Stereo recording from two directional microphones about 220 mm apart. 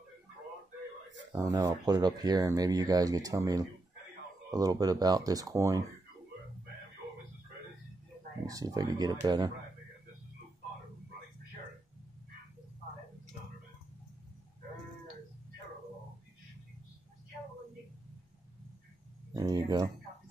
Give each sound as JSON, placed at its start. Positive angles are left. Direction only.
{"t": 1.3, "sound": "speech", "side_deg": -15}
{"t": 8.5, "sound": "speech", "side_deg": -15}
{"t": 19.3, "sound": "a sound", "side_deg": -20}